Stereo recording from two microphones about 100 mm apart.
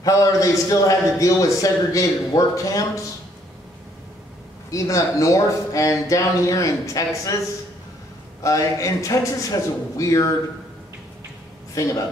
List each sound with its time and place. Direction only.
0.0 s a man's voice: 35° left (ahead or behind)
4.6 s a man's voice: 35° left (ahead or behind)
8.4 s a man's voice: 35° left (ahead or behind)
11.8 s a man's voice: 30° left (ahead or behind)